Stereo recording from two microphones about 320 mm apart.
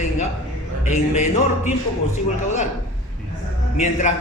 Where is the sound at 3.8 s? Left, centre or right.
Left.